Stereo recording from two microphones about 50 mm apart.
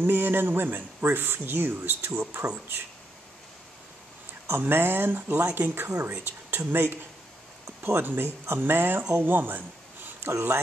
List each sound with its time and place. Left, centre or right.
0.0 s speech: right
4.5 s speech: right